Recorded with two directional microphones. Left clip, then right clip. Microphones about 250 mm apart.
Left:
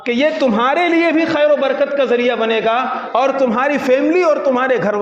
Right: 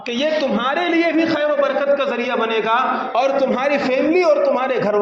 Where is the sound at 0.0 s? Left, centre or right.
Left.